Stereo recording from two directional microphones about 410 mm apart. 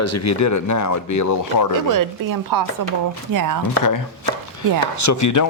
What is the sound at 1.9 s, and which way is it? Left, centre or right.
Speech, right.